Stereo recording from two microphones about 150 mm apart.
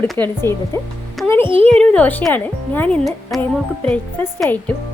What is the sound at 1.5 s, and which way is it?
Speech, 40° right (ahead or behind).